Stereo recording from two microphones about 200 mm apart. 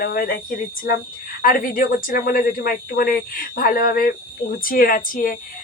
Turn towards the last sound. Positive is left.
turn(degrees=45)  # may be behind; listen again after turning